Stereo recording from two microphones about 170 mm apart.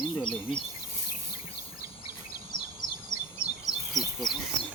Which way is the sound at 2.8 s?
25° left (ahead or behind).